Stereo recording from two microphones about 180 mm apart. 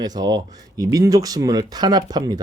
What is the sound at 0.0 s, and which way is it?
Speech, 20° right (ahead or behind).